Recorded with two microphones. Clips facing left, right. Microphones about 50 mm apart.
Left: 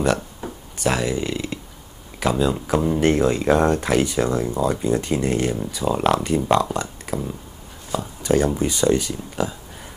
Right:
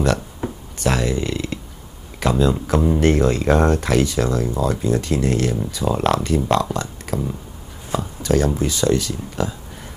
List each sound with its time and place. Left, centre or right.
0.4 s a sound: right
0.7 s speech: centre
4.0 s speech: centre
5.9 s speech: centre
7.1 s speech: centre
8.2 s a sound: centre
8.6 s speech: left